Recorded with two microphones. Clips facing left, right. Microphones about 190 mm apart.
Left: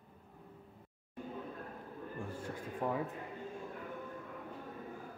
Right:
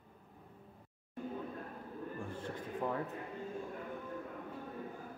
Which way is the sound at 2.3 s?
10° left (ahead or behind).